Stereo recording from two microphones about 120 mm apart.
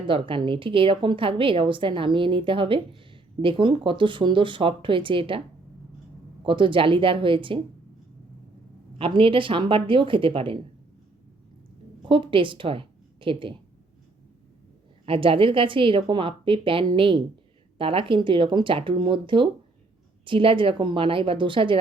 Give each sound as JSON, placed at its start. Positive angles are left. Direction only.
{"t": 0.1, "sound": "a woman's voice", "side_deg": -45}
{"t": 6.4, "sound": "a woman's voice", "side_deg": -45}
{"t": 9.0, "sound": "a woman's voice", "side_deg": -50}
{"t": 12.0, "sound": "a woman's voice", "side_deg": -45}
{"t": 15.0, "sound": "a woman's voice", "side_deg": -50}